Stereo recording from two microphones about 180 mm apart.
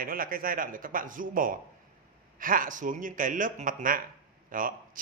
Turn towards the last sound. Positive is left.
turn(degrees=-50)  # may be behind; listen again after turning